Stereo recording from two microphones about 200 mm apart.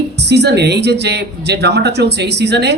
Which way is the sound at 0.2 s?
55° right (ahead or behind).